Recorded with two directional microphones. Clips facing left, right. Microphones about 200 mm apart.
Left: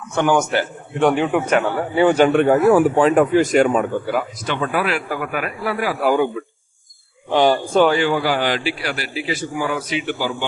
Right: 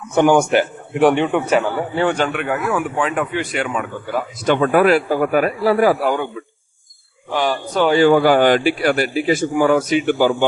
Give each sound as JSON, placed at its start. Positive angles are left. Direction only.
{"t": 0.1, "sound": "a man's voice", "side_deg": -15}
{"t": 1.1, "sound": "a man's voice", "side_deg": 5}
{"t": 2.3, "sound": "speech", "side_deg": 35}
{"t": 4.4, "sound": "a man's voice", "side_deg": -50}
{"t": 6.0, "sound": "a man's voice", "side_deg": 5}
{"t": 7.3, "sound": "speech", "side_deg": 25}
{"t": 7.9, "sound": "a man's voice", "side_deg": -50}